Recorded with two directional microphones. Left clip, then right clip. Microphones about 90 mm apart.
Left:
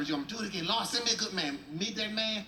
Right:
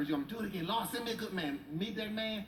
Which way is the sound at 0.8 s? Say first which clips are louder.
Left 7 dB; 20° right (ahead or behind).